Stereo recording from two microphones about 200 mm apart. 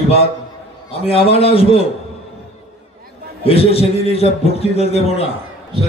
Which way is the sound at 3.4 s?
30° left (ahead or behind).